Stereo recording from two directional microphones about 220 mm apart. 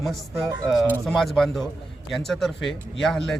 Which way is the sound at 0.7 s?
Centre (ahead or behind).